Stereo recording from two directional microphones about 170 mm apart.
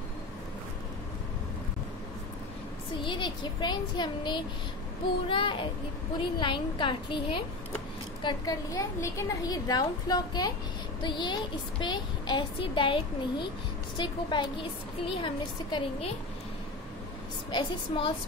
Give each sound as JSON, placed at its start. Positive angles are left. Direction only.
{"t": 3.0, "sound": "a woman's voice", "side_deg": 30}
{"t": 17.5, "sound": "a woman's voice", "side_deg": 30}